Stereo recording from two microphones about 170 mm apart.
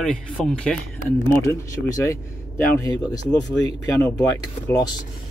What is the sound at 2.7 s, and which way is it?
Speech, 20° left (ahead or behind).